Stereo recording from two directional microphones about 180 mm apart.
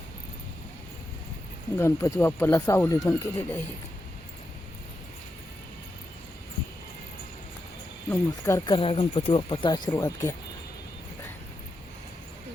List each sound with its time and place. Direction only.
1.7 s speech: 15° left (ahead or behind)
8.1 s speech: 15° left (ahead or behind)
8.7 s speech: 30° left (ahead or behind)